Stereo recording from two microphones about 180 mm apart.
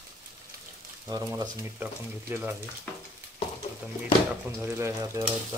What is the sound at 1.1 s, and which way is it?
Speech, 20° right (ahead or behind).